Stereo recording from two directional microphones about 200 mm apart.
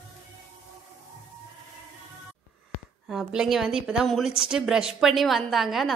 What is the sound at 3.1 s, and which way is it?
A woman's voice, centre (ahead or behind).